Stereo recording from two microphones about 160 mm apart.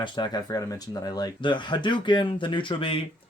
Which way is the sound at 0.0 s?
25° left (ahead or behind).